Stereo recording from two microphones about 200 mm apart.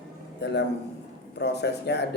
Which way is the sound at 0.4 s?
60° left (ahead or behind).